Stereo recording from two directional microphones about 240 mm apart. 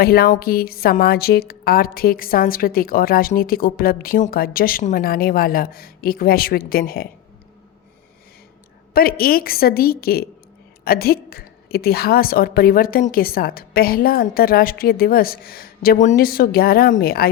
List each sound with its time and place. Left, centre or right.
0.0 s a woman's voice: left
8.9 s a woman's voice: left